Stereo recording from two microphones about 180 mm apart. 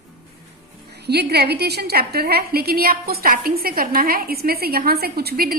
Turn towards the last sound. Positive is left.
turn(degrees=-55)  # may be behind; listen again after turning